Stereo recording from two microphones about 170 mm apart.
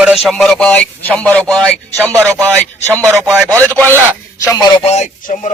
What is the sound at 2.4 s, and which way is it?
Speech, 15° right (ahead or behind).